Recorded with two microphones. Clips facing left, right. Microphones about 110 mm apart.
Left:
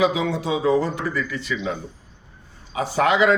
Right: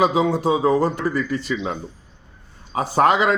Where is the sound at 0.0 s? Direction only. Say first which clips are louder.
Right 3 dB; 45° right (ahead or behind).